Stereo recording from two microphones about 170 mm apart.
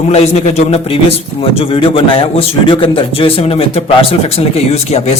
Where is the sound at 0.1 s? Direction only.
40° left (ahead or behind).